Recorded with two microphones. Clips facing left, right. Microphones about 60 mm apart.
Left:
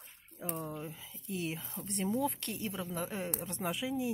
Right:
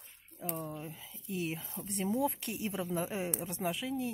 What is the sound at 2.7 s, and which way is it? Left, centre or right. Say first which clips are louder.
Speech: right 5 dB; right.